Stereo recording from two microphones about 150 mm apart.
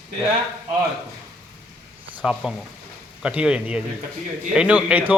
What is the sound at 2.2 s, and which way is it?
Speech, 5° right (ahead or behind).